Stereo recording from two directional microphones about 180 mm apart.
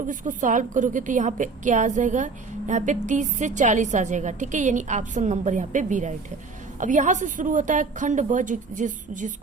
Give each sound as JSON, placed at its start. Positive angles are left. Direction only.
{"t": 0.1, "sound": "a woman's voice", "side_deg": -45}